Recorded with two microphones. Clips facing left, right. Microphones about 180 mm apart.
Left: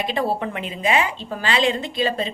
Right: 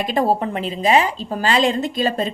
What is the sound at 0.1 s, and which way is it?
A woman's voice, 40° right (ahead or behind).